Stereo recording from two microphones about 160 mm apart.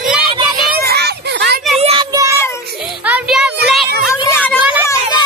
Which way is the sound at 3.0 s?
5° right (ahead or behind).